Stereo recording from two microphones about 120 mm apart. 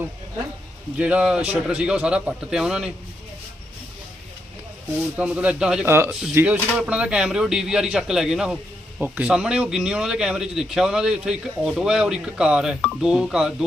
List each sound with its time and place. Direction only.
0.9 s speech: 10° right (ahead or behind)
5.1 s speech: 10° right (ahead or behind)
5.8 s speech: 20° right (ahead or behind)
6.1 s speech: 5° right (ahead or behind)